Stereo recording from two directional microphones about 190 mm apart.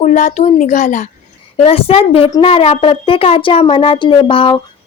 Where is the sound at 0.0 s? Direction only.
40° left (ahead or behind).